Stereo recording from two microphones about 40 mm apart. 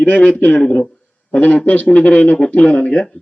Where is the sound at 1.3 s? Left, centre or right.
Left.